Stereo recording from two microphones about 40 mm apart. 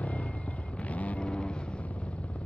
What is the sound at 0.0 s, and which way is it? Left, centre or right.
Vehicle, left.